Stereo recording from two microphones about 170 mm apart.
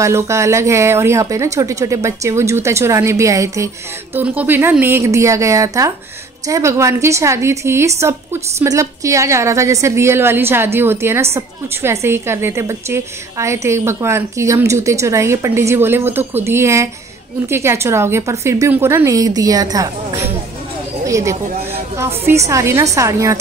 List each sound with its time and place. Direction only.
0.0 s a woman's voice: 15° right (ahead or behind)